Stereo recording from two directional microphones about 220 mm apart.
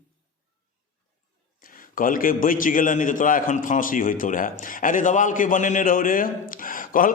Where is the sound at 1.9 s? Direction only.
40° left (ahead or behind).